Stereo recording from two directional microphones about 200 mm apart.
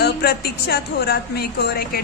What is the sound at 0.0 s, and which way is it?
A woman's voice, 50° left (ahead or behind).